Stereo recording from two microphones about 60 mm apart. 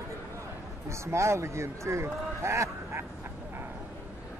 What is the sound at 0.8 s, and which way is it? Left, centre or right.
A man's voice, right.